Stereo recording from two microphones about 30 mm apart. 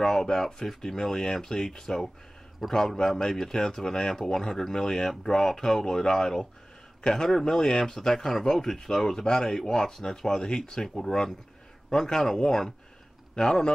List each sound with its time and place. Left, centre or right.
0.0 s a man's voice: centre